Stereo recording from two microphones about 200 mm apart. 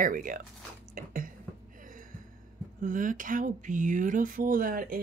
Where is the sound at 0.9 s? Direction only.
45° right (ahead or behind).